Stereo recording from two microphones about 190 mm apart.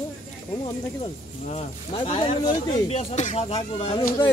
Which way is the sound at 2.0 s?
30° left (ahead or behind).